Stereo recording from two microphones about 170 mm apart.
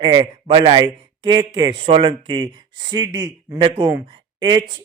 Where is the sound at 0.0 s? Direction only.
25° right (ahead or behind).